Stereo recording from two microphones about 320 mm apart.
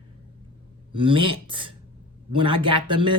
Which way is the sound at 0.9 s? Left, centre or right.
Centre.